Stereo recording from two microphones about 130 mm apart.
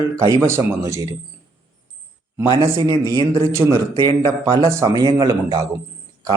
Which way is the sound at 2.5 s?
25° right (ahead or behind).